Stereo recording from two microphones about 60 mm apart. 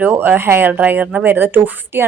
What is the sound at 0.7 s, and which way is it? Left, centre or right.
A woman's voice, right.